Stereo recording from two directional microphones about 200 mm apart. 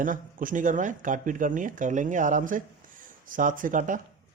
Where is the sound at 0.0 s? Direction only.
40° right (ahead or behind).